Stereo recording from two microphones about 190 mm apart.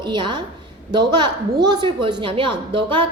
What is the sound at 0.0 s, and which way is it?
A woman's voice, 25° right (ahead or behind).